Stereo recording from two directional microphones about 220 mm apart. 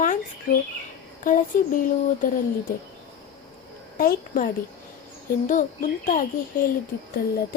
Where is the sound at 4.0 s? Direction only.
40° left (ahead or behind).